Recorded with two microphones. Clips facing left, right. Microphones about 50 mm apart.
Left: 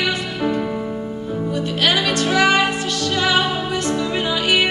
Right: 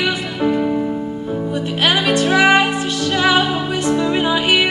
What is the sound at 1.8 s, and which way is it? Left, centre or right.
Music, right.